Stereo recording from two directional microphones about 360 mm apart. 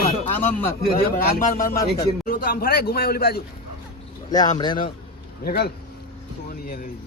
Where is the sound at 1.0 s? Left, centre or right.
Left.